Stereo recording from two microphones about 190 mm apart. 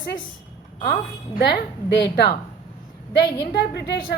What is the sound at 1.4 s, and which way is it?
Speech, 60° left (ahead or behind).